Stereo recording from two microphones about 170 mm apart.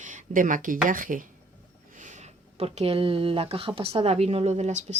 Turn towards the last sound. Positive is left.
turn(degrees=-40)  # may be behind; listen again after turning